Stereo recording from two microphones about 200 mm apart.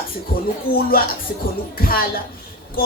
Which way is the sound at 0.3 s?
50° left (ahead or behind).